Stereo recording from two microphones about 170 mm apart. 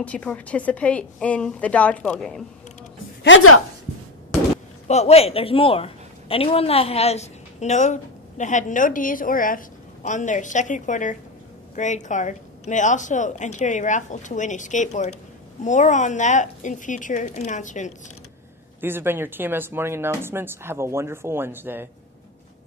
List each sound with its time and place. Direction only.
0.0 s a woman's voice: 5° left (ahead or behind)
3.3 s a woman's voice: 90° left
4.8 s a woman's voice: 40° left (ahead or behind)
18.8 s speech: 15° right (ahead or behind)